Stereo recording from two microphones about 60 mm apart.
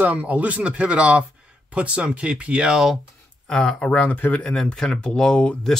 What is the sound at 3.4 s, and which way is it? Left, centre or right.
Speech, centre.